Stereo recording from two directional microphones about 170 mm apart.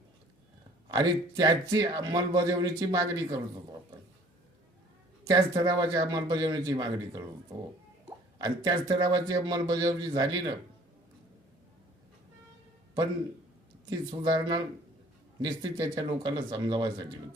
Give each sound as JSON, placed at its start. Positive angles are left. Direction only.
{"t": 0.9, "sound": "speech", "side_deg": -25}
{"t": 5.3, "sound": "speech", "side_deg": -20}
{"t": 8.4, "sound": "speech", "side_deg": -25}
{"t": 14.2, "sound": "speech", "side_deg": -25}